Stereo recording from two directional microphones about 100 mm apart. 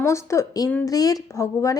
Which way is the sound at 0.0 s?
30° left (ahead or behind).